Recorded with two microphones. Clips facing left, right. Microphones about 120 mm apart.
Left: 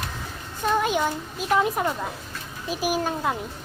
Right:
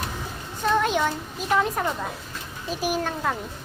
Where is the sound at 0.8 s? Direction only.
5° left (ahead or behind).